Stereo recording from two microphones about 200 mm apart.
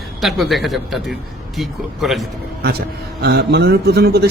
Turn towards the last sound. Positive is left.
turn(degrees=-55)  # may be behind; listen again after turning